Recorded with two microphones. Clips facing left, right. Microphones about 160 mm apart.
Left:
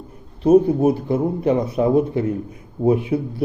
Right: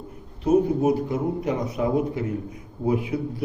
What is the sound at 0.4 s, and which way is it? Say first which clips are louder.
A man's voice: left 5 dB; 30° left (ahead or behind).